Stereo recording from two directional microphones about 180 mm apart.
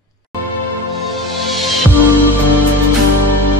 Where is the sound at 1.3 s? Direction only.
Centre (ahead or behind).